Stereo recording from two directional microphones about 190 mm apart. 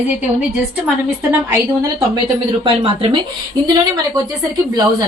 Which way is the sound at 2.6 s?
25° right (ahead or behind).